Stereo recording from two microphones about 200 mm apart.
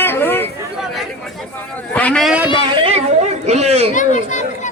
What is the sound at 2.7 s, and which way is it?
Speech, 25° right (ahead or behind).